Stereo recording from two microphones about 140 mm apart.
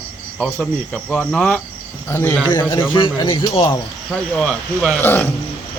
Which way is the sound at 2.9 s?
35° left (ahead or behind).